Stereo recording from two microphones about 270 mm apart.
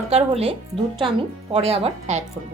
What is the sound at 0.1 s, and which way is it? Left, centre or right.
Speech, right.